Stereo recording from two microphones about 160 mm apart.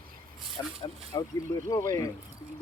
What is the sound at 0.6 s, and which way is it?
Speech, 20° left (ahead or behind).